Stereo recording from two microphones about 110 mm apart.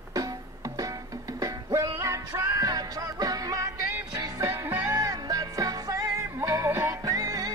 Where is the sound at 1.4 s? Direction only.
30° right (ahead or behind).